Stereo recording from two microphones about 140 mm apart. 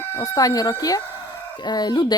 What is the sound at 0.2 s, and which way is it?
A woman's voice, 25° left (ahead or behind).